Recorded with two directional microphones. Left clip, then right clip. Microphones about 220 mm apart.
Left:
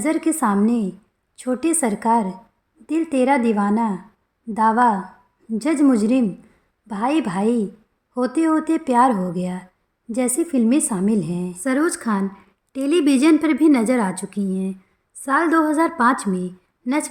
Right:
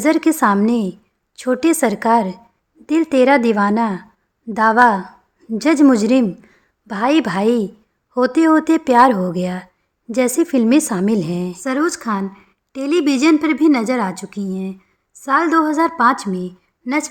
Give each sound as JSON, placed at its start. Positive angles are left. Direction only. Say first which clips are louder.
{"t": 0.0, "sound": "speech", "louder": "right 6 dB", "side_deg": -40}
{"t": 11.6, "sound": "a woman's voice", "louder": "right 1 dB", "side_deg": -20}